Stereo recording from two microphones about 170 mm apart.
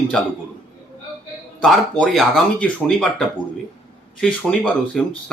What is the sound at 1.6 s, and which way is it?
Speech, centre (ahead or behind).